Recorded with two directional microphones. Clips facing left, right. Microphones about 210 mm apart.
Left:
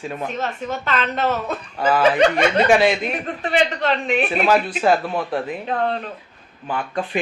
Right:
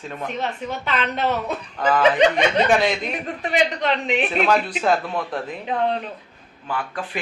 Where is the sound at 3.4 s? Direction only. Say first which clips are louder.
Left 1 dB; 15° right (ahead or behind).